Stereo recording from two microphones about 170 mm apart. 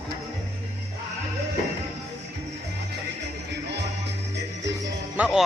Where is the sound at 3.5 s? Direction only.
90° right.